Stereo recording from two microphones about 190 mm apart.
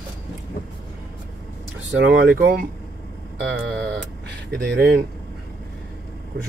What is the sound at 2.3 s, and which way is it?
Speech, 50° right (ahead or behind).